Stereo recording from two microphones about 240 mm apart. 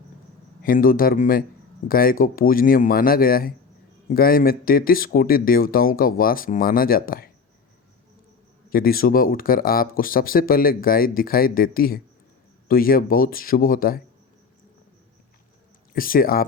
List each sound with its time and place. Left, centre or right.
0.6 s speech: left
8.7 s speech: left
16.0 s speech: left